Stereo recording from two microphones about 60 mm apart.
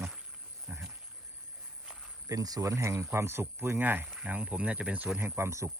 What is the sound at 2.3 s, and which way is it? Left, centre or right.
Speech, right.